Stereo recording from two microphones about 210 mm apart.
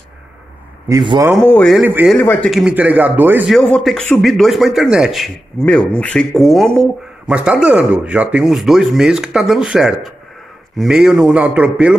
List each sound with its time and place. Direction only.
0.8 s speech: 20° right (ahead or behind)
1.4 s speech: 10° left (ahead or behind)
1.8 s a man's voice: 5° right (ahead or behind)
3.5 s a man's voice: 5° left (ahead or behind)